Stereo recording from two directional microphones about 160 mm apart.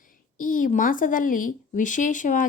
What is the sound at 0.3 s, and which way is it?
A woman's voice, 55° left (ahead or behind).